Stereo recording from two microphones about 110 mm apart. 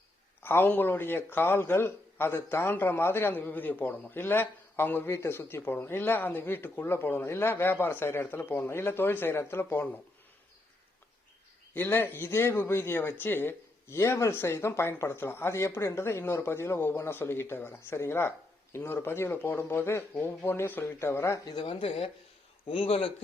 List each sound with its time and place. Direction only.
0.4 s speech: 20° left (ahead or behind)
11.7 s speech: 20° left (ahead or behind)
21.5 s speech: 50° left (ahead or behind)